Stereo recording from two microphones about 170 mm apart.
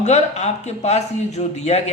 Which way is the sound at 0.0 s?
40° left (ahead or behind).